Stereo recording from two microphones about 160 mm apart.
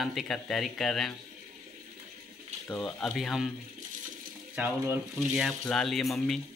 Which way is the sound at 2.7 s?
Centre (ahead or behind).